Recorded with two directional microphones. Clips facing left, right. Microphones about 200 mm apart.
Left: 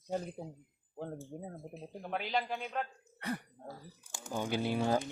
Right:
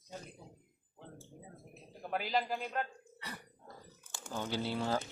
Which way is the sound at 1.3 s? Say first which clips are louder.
Left 10 dB; 60° left (ahead or behind).